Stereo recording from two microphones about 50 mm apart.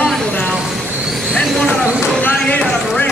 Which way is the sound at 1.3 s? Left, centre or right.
Centre.